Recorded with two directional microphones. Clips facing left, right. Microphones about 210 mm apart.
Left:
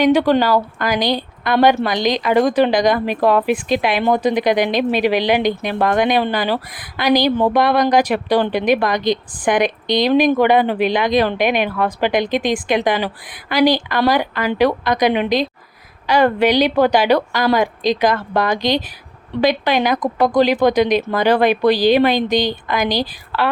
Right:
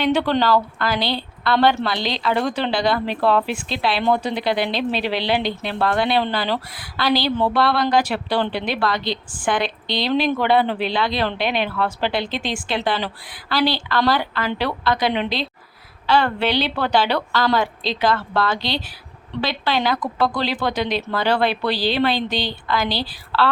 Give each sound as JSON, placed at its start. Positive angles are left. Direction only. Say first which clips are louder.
{"t": 0.0, "sound": "a woman's voice", "louder": "left 5 dB", "side_deg": 10}